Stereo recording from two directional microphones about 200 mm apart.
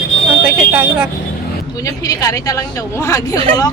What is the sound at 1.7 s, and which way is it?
A woman's voice, 15° left (ahead or behind).